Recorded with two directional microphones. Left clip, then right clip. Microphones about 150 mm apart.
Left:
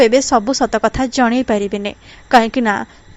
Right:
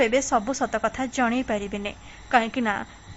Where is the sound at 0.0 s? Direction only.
30° left (ahead or behind).